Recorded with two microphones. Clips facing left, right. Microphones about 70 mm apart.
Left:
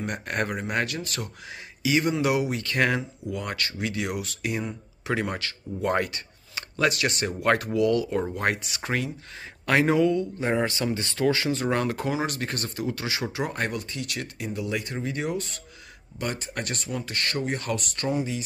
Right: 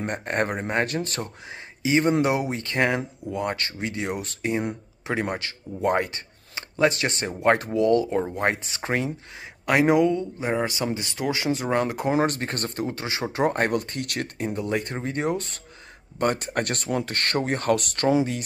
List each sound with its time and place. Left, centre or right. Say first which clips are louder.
0.0 s speech: right 3 dB; right
9.7 s a man's voice: right 2 dB; centre
12.1 s speech: right 5 dB; right
13.3 s speech: right 6 dB; right